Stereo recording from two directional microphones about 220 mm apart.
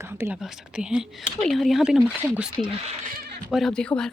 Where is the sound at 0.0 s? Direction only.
10° right (ahead or behind).